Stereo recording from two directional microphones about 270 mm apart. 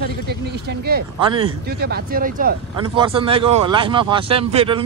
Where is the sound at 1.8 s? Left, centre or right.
Right.